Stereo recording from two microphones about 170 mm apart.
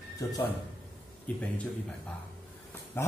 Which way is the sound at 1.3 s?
10° left (ahead or behind).